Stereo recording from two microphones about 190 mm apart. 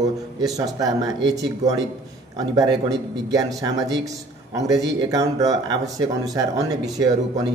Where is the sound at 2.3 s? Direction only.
20° right (ahead or behind).